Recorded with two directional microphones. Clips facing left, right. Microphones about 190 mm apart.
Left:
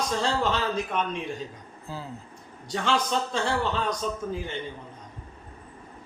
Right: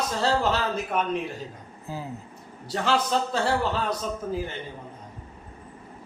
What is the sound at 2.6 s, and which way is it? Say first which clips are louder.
A man's voice: right 1 dB; 5° right (ahead or behind).